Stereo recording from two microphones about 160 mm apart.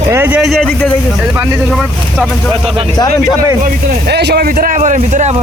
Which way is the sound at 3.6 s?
90° right.